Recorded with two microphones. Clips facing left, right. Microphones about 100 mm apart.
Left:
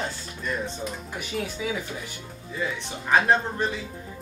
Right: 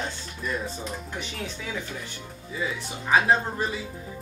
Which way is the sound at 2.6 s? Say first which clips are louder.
Left 1 dB; 5° right (ahead or behind).